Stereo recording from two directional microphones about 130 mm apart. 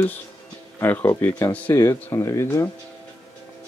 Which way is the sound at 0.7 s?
15° left (ahead or behind).